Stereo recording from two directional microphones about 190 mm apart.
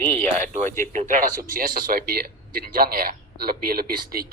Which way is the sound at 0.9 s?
40° right (ahead or behind).